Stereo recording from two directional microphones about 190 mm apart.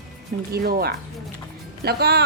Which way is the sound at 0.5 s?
55° right (ahead or behind).